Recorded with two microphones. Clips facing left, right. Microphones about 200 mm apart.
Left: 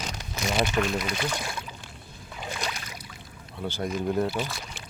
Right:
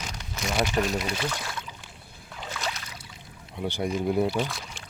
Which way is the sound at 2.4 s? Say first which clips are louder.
Even; 15° left (ahead or behind).